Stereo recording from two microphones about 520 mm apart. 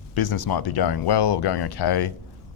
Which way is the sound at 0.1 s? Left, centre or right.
Left.